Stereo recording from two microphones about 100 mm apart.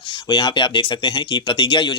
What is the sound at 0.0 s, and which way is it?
Speech, 55° left (ahead or behind).